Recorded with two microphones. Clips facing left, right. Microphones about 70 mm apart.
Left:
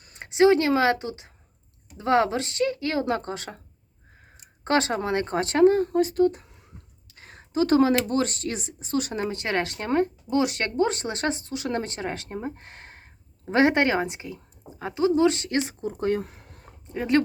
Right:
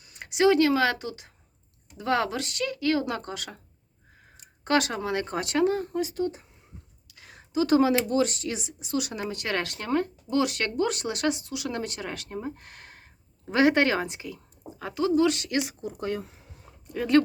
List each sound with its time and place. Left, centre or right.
0.0 s speech: left
4.6 s speech: left
16.2 s a sound: left
16.8 s speech: left